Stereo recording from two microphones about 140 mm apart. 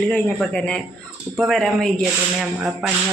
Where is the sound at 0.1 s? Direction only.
10° left (ahead or behind).